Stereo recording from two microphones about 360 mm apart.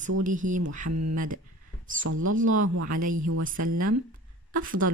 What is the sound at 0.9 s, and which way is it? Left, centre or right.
Speech, right.